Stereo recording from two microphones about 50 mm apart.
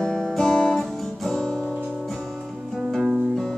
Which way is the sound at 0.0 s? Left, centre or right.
Centre.